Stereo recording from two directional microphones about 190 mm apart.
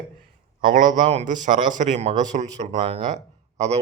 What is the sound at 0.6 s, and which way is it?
Speech, 45° right (ahead or behind).